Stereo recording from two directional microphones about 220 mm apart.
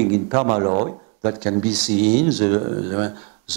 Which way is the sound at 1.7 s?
5° right (ahead or behind).